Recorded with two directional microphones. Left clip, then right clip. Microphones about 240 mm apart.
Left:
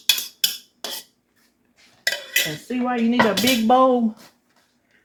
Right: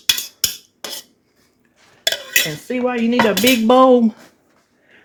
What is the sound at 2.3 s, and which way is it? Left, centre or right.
Dishes, right.